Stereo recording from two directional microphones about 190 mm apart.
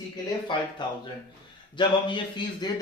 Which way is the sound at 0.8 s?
25° left (ahead or behind).